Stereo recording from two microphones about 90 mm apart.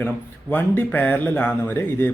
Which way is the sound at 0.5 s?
20° left (ahead or behind).